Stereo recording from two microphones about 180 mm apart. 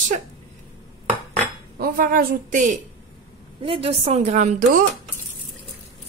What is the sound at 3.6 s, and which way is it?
A woman's voice, 30° right (ahead or behind).